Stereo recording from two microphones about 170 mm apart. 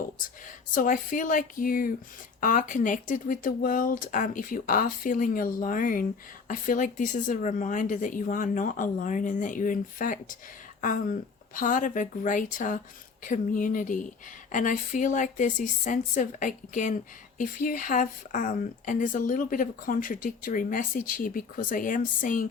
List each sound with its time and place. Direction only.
0.4 s speech: 50° left (ahead or behind)